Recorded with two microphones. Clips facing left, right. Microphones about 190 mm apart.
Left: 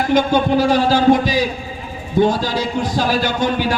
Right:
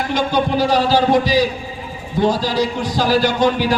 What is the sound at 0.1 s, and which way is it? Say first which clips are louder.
Speech: left 4 dB; 50° left (ahead or behind).